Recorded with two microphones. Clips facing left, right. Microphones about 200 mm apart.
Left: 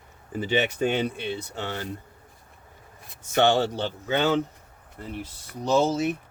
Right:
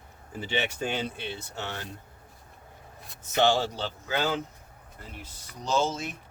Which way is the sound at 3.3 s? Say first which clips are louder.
Left 3 dB; 55° left (ahead or behind).